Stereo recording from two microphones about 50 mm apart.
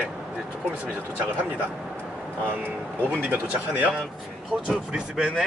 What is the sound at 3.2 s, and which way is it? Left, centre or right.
Speech, right.